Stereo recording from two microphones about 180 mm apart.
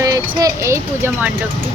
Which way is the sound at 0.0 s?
20° right (ahead or behind).